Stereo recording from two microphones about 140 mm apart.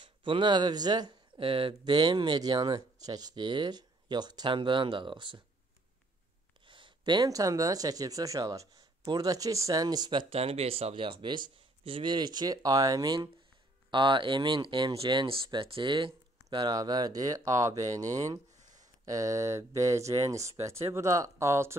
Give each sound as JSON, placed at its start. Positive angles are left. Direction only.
{"t": 0.0, "sound": "speech", "side_deg": -35}
{"t": 6.6, "sound": "speech", "side_deg": -35}
{"t": 10.3, "sound": "speech", "side_deg": -45}